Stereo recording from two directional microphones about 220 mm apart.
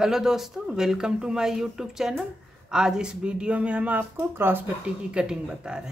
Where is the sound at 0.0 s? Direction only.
Centre (ahead or behind).